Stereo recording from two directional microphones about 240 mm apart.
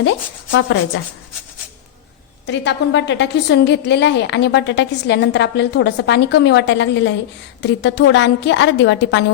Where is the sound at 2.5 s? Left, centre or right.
Left.